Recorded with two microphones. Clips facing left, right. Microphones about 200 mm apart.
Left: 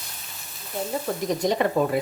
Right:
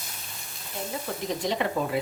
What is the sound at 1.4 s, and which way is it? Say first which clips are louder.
Frying: left 6 dB; 45° left (ahead or behind).